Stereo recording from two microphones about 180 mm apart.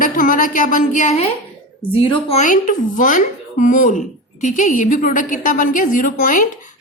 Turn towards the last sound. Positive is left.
turn(degrees=50)  # may be behind; listen again after turning